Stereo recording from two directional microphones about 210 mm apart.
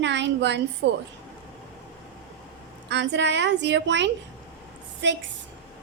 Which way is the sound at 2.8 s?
55° right (ahead or behind).